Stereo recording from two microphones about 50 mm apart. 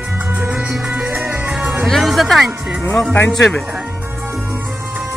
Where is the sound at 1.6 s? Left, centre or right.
Right.